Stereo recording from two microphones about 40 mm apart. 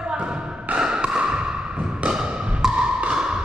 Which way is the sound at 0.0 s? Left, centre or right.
Right.